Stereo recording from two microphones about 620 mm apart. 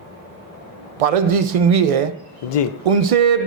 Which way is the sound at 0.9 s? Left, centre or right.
Right.